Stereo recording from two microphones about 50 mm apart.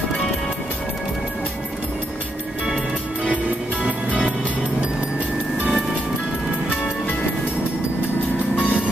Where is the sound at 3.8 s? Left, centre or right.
Right.